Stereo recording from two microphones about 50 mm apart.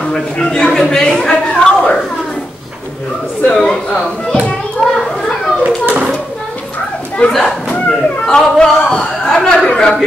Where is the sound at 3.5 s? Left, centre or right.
Centre.